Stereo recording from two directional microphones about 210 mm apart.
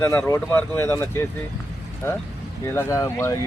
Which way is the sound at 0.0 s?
10° left (ahead or behind).